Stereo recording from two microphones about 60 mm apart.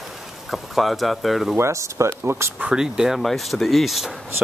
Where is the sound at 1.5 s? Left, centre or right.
Right.